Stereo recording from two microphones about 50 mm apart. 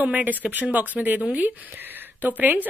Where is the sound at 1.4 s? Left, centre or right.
Right.